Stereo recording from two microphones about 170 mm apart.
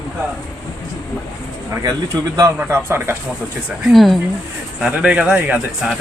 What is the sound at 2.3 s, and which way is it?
Speech, 15° right (ahead or behind).